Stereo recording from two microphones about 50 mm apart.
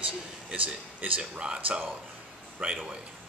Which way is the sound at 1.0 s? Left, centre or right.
Right.